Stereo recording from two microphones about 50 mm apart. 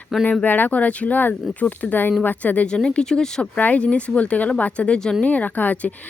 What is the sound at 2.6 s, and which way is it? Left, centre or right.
Speech, centre.